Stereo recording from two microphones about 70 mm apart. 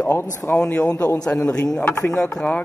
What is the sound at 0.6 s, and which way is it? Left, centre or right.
A man's voice, centre.